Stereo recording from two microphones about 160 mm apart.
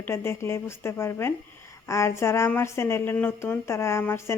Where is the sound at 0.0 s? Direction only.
15° left (ahead or behind).